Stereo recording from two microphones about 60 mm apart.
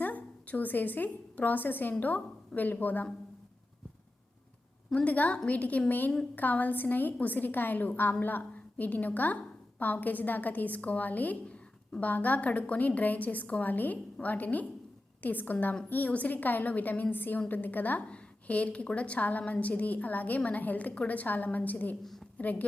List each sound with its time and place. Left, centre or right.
0.0 s a woman's voice: left
4.9 s a woman's voice: left